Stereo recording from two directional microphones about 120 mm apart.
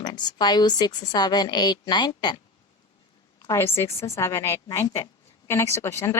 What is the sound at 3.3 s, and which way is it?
A woman's voice, 25° left (ahead or behind).